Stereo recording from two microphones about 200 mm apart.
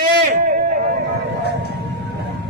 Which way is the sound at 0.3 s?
40° right (ahead or behind).